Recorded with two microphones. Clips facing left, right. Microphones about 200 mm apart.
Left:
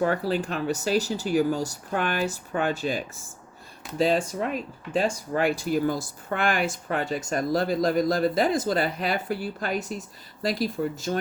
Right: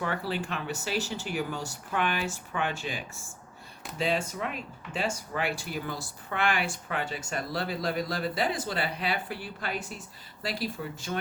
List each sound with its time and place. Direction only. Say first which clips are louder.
0.0 s speech: left 7 dB; 45° left (ahead or behind)